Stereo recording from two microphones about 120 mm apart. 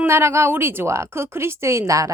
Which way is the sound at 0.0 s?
20° right (ahead or behind).